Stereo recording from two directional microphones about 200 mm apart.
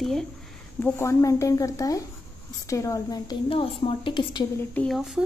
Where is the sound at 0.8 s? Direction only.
15° left (ahead or behind).